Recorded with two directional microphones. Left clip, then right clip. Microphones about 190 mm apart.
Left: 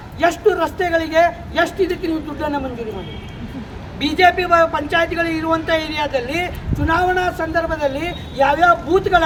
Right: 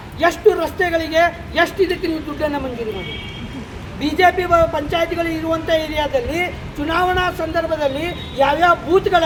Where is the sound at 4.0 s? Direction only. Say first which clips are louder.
Left 1 dB; centre (ahead or behind).